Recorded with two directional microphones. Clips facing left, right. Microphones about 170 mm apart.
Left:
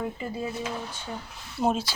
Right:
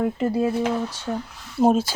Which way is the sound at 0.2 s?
75° right (ahead or behind).